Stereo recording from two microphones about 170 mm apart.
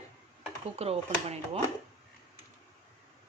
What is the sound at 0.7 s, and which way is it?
Speech, 35° right (ahead or behind).